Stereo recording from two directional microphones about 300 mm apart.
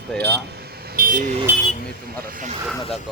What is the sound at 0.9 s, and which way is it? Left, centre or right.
Vehicle, right.